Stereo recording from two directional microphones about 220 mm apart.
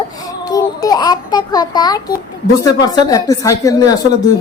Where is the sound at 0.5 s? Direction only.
15° left (ahead or behind).